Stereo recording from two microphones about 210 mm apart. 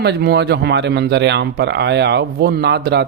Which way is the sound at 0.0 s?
50° right (ahead or behind).